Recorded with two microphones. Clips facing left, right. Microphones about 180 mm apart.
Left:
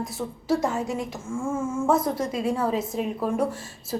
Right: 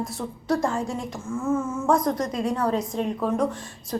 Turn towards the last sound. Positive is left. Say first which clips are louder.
# right 1 dB
turn(degrees=5)  # may be behind; listen again after turning